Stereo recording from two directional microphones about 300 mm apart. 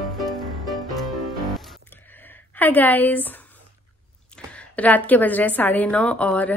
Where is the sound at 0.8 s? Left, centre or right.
Centre.